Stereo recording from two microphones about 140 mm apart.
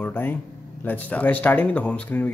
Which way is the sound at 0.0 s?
15° left (ahead or behind).